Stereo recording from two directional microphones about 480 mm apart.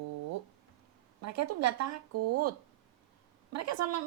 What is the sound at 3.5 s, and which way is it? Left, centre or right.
Speech, right.